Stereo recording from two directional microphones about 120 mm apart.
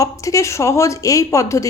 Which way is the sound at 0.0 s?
25° left (ahead or behind).